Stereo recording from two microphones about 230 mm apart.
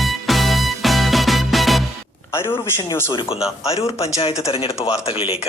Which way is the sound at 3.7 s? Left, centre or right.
Left.